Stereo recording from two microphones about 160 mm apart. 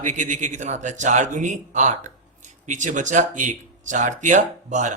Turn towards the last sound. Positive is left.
turn(degrees=-50)  # may be behind; listen again after turning